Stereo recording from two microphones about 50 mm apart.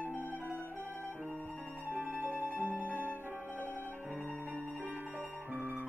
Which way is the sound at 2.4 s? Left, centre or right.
Right.